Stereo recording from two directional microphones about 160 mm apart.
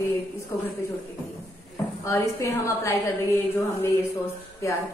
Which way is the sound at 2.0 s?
20° left (ahead or behind).